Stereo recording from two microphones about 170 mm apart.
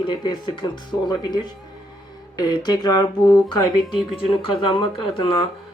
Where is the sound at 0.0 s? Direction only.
25° left (ahead or behind).